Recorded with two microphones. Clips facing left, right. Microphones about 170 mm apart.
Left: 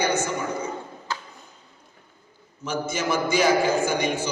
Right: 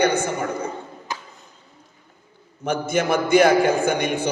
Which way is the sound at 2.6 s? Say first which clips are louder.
Right 5 dB; 55° right (ahead or behind).